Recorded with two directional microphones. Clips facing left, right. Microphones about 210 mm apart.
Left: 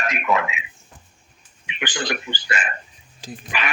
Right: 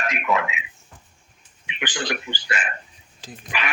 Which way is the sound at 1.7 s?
45° left (ahead or behind).